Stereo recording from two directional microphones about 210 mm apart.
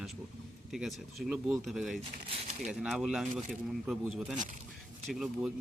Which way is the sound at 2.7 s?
Centre (ahead or behind).